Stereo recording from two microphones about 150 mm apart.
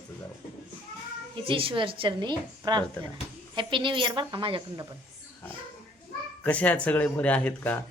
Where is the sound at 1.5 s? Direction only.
35° right (ahead or behind).